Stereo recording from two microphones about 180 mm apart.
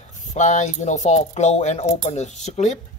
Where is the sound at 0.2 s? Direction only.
40° left (ahead or behind).